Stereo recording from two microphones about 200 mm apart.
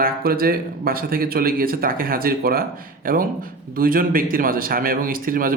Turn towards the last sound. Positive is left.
turn(degrees=-45)  # may be behind; listen again after turning